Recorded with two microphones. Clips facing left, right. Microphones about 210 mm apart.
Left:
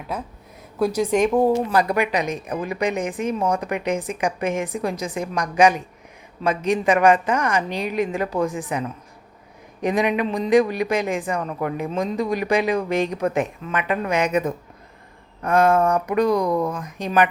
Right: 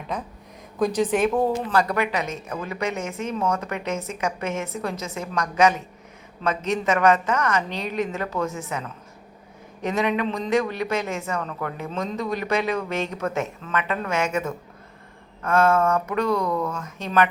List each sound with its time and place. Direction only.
0.8 s a woman's voice: 10° left (ahead or behind)
9.8 s a woman's voice: 15° left (ahead or behind)